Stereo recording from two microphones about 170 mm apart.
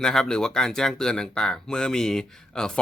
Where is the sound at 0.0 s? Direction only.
5° left (ahead or behind).